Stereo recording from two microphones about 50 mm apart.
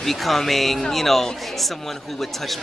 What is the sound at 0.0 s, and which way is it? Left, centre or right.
Speech, centre.